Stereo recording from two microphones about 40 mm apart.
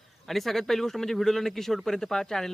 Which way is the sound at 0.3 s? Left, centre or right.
Centre.